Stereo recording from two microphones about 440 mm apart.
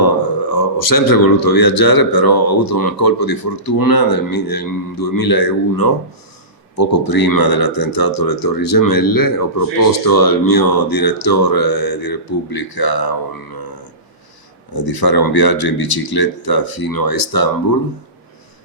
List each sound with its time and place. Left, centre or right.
0.0 s speech: left